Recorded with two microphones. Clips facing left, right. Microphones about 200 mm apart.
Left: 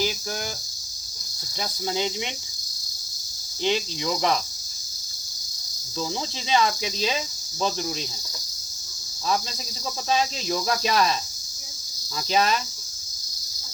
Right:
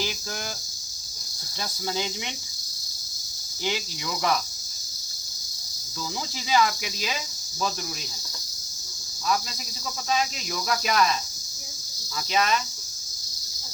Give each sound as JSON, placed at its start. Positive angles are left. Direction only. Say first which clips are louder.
{"t": 1.9, "sound": "cricket", "louder": "left 3 dB", "side_deg": 20}
{"t": 3.6, "sound": "cricket", "louder": "left 5 dB", "side_deg": 25}
{"t": 6.5, "sound": "cricket", "louder": "left 1 dB", "side_deg": 25}
{"t": 10.1, "sound": "cricket", "louder": "left 3 dB", "side_deg": 30}
{"t": 12.3, "sound": "cricket", "louder": "left 2 dB", "side_deg": 35}